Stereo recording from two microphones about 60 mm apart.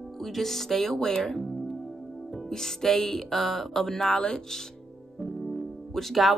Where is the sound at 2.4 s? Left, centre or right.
Centre.